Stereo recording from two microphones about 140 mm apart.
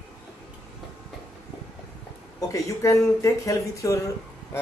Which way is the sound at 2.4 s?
25° left (ahead or behind).